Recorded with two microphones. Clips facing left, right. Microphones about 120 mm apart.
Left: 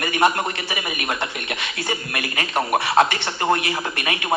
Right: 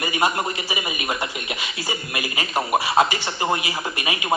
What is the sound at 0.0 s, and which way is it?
Speech, 10° right (ahead or behind).